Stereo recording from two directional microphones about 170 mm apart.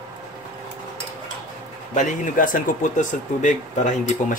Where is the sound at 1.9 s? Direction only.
50° left (ahead or behind).